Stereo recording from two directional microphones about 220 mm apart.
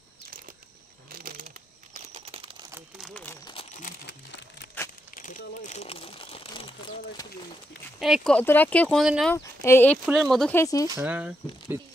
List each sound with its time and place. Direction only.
1.1 s a sound: 40° right (ahead or behind)
2.0 s a sound: 30° right (ahead or behind)
3.0 s a sound: 5° left (ahead or behind)
3.4 s crumpling: 30° left (ahead or behind)
4.0 s crumpling: 50° left (ahead or behind)
4.8 s crumpling: 10° left (ahead or behind)
5.1 s crumpling: 35° left (ahead or behind)
8.0 s speech: centre (ahead or behind)
9.3 s speech: 15° left (ahead or behind)
10.0 s speech: centre (ahead or behind)
11.0 s speech: 5° right (ahead or behind)